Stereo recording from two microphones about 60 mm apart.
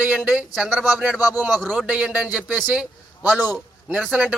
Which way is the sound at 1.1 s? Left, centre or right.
Right.